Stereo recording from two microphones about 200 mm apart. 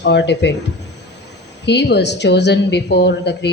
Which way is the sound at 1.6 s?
60° left (ahead or behind).